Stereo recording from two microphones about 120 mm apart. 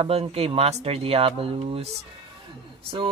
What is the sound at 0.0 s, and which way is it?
Speech, 55° right (ahead or behind).